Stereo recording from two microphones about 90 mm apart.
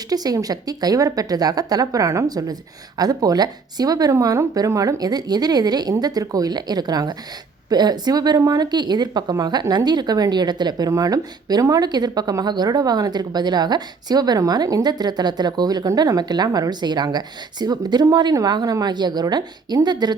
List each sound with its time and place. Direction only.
0.1 s speech: 45° right (ahead or behind)